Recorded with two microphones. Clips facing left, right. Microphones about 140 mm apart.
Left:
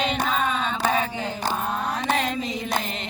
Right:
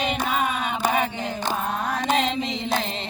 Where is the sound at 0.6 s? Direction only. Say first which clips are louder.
Even; 15° right (ahead or behind).